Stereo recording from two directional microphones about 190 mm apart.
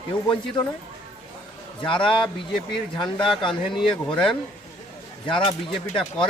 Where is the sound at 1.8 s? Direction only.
25° left (ahead or behind).